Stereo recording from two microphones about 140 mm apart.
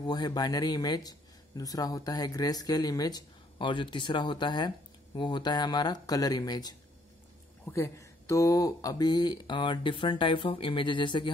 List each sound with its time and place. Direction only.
0.0 s speech: 30° left (ahead or behind)